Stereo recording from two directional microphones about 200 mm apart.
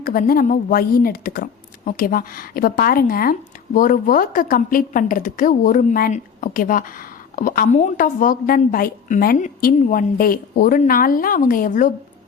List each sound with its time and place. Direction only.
0.0 s a woman's voice: 45° left (ahead or behind)